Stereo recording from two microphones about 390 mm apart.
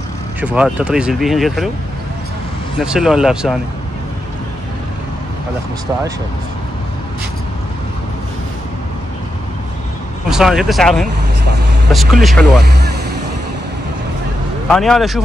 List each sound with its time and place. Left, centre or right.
0.4 s speech: centre
2.8 s speech: centre
10.3 s speech: centre
12.6 s boat: right
14.7 s speech: centre